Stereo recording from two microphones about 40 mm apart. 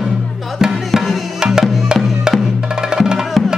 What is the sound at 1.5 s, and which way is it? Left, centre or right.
Music, centre.